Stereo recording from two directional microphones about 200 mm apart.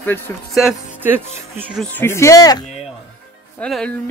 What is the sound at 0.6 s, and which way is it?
Speech, 10° right (ahead or behind).